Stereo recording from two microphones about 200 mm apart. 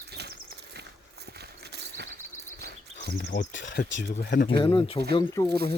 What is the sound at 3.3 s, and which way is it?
Speech, 40° left (ahead or behind).